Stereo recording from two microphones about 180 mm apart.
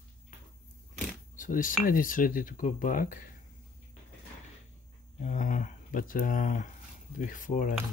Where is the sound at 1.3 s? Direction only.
45° left (ahead or behind).